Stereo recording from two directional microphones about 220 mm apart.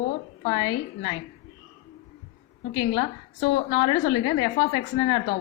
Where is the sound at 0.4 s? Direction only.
20° left (ahead or behind).